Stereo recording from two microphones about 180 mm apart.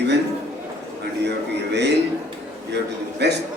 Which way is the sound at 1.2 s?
70° right (ahead or behind).